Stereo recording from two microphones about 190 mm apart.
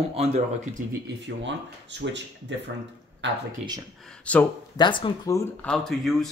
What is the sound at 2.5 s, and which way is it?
Speech, 70° right (ahead or behind).